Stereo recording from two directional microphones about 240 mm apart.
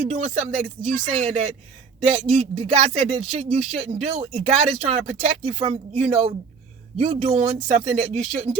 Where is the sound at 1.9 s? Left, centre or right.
Right.